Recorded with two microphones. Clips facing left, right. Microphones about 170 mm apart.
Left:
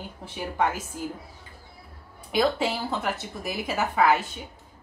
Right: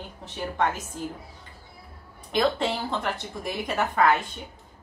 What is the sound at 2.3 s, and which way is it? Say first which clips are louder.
A woman's voice: even; 5° left (ahead or behind).